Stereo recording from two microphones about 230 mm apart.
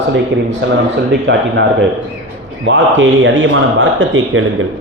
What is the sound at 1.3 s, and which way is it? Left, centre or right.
Speech, right.